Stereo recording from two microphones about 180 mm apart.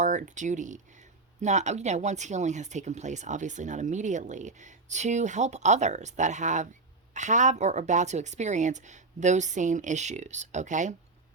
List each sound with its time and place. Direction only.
0.0 s speech: 45° right (ahead or behind)